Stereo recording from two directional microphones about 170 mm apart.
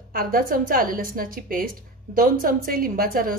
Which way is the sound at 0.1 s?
60° right (ahead or behind).